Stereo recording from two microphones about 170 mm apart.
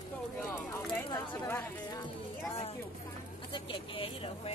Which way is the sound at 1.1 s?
15° left (ahead or behind).